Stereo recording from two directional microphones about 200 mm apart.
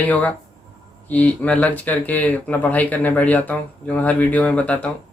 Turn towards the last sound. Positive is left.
turn(degrees=5)  # may be behind; listen again after turning